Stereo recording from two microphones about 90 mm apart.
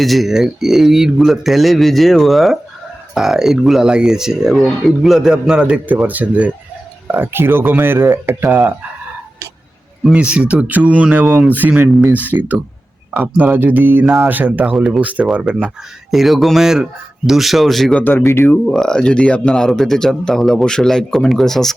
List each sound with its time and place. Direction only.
0.0 s speech: centre (ahead or behind); by 8.7 s 25° right (ahead or behind)
10.0 s speech: 10° right (ahead or behind)
16.1 s speech: centre (ahead or behind)
18.0 s speech: 30° left (ahead or behind)
18.6 s speech: 5° left (ahead or behind)